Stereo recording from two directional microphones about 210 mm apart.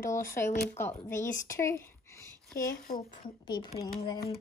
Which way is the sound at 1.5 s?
15° left (ahead or behind).